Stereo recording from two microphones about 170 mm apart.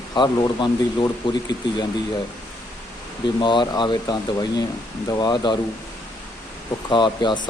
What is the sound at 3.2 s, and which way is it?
Speech, 25° left (ahead or behind).